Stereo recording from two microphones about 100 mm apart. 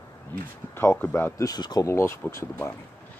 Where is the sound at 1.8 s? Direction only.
25° left (ahead or behind).